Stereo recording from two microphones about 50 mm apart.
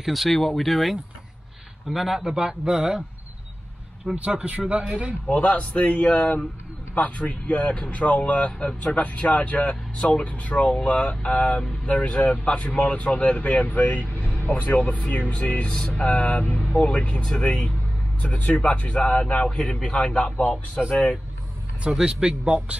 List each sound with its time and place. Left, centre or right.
0.0 s speech: centre
4.2 s speech: right
5.3 s speech: left
21.9 s speech: centre